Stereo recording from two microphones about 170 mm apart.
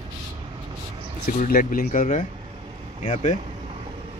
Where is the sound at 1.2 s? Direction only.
55° left (ahead or behind).